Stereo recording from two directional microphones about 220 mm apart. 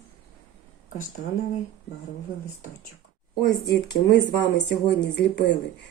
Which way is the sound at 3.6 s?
50° left (ahead or behind).